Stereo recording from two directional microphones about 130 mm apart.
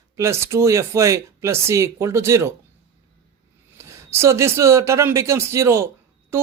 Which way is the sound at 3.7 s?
20° right (ahead or behind).